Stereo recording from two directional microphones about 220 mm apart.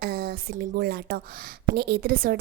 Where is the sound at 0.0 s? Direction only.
45° right (ahead or behind).